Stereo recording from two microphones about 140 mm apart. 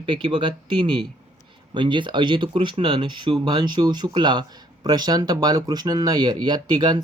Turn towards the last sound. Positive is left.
turn(degrees=-30)  # may be behind; listen again after turning